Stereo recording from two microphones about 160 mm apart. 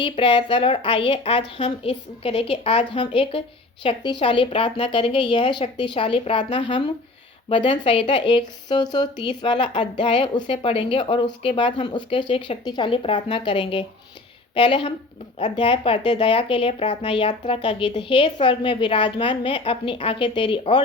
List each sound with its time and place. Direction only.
0.0 s a woman's voice: 30° left (ahead or behind)